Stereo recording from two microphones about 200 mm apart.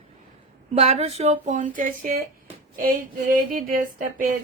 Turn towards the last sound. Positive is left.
turn(degrees=-40)  # may be behind; listen again after turning